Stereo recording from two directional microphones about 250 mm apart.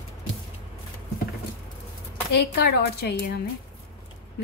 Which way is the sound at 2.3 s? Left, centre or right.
Left.